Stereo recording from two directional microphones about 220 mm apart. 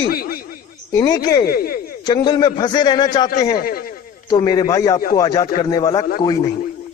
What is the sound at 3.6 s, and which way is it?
Speech, 40° left (ahead or behind).